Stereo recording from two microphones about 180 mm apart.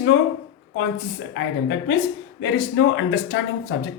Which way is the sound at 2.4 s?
90° left.